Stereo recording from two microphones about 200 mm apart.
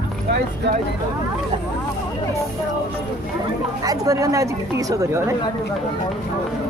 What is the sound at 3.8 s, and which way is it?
A woman's voice, 15° right (ahead or behind).